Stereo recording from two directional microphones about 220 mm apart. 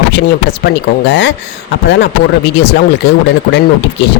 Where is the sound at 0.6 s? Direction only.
50° left (ahead or behind).